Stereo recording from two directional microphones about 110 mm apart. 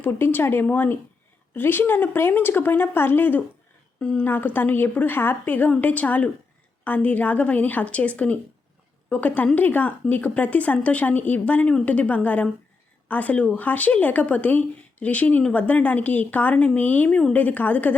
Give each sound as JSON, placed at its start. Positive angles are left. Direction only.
{"t": 0.0, "sound": "a woman's voice", "side_deg": 20}